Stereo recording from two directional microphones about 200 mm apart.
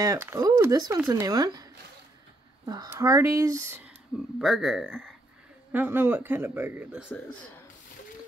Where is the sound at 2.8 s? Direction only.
15° right (ahead or behind).